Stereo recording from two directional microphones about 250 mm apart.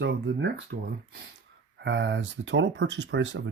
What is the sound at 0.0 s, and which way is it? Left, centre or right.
Speech, right.